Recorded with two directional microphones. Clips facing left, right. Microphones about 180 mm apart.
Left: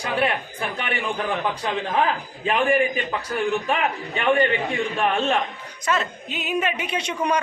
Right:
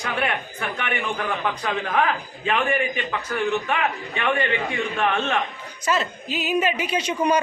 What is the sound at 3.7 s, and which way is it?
Speech, 30° left (ahead or behind).